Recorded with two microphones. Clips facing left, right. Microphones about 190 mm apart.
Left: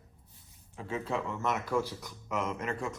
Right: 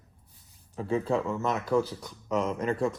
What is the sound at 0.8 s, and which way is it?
Speech, 35° right (ahead or behind).